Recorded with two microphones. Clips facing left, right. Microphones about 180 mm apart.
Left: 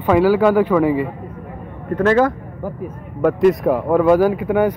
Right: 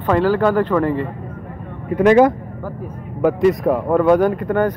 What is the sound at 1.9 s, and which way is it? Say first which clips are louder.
Speech: right 3 dB; 15° right (ahead or behind).